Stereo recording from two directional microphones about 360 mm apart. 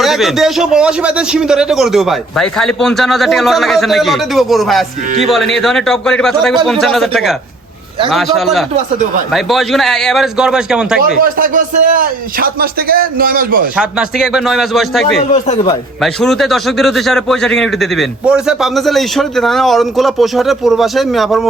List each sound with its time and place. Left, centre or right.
0.0 s a man's voice: centre
9.3 s a man's voice: centre
11.2 s a man's voice: right
13.7 s a man's voice: centre
15.3 s speech: centre
16.2 s a man's voice: centre